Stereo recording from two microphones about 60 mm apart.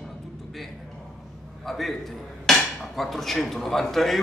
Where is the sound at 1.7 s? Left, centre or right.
Centre.